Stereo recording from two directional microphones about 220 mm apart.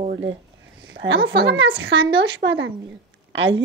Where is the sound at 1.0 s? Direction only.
55° right (ahead or behind).